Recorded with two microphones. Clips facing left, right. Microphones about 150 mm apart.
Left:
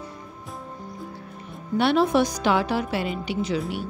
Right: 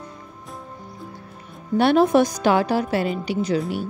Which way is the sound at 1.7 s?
45° right (ahead or behind).